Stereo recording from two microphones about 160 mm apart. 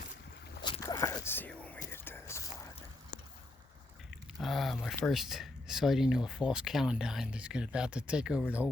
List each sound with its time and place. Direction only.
0.8 s whispering: 20° left (ahead or behind)
4.4 s a sound: centre (ahead or behind)
4.9 s speech: centre (ahead or behind)